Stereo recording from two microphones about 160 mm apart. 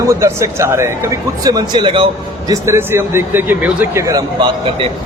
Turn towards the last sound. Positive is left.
turn(degrees=-20)  # may be behind; listen again after turning